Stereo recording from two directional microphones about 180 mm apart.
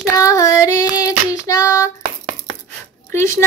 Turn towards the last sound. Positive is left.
turn(degrees=15)  # may be behind; listen again after turning